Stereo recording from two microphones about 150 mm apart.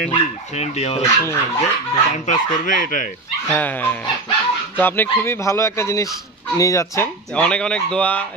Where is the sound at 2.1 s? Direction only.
60° left (ahead or behind).